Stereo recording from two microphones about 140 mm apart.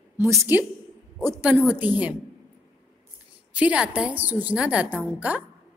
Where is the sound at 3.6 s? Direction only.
10° right (ahead or behind).